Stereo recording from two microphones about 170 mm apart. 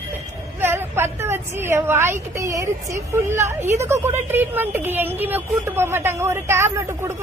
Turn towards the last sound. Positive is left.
turn(degrees=-15)  # may be behind; listen again after turning